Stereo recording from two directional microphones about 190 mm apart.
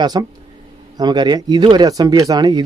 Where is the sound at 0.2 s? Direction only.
20° right (ahead or behind).